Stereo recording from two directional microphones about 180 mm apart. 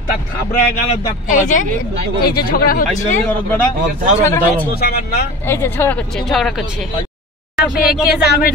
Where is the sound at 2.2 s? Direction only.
55° left (ahead or behind).